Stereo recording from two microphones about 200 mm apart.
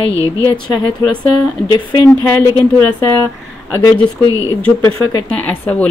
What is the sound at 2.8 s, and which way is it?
Speech, 10° left (ahead or behind).